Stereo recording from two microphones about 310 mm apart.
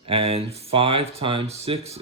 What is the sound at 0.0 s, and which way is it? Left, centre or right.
Speech, centre.